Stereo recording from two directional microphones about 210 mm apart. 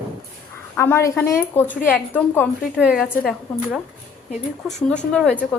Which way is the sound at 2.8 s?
5° right (ahead or behind).